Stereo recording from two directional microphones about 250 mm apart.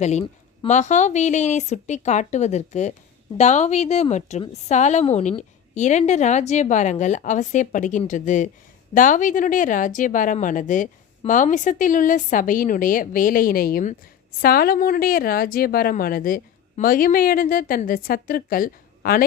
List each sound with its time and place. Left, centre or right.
0.0 s a woman's voice: left